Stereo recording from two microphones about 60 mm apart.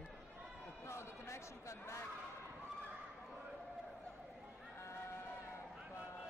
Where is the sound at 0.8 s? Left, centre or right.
Left.